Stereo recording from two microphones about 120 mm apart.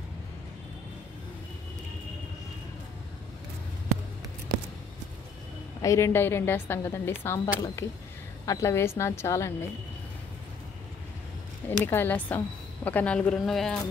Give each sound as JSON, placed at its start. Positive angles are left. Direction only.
{"t": 5.8, "sound": "a woman's voice", "side_deg": 25}
{"t": 7.3, "sound": "a woman's voice", "side_deg": 30}
{"t": 11.8, "sound": "a woman's voice", "side_deg": 15}